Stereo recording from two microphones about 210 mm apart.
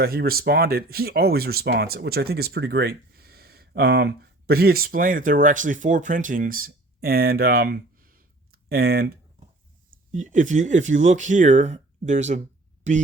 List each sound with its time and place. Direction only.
0.0 s speech: 45° right (ahead or behind)
10.1 s speech: 35° right (ahead or behind)